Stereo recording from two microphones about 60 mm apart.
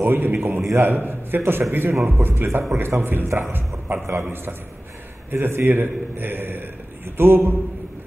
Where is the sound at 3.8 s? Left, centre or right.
Right.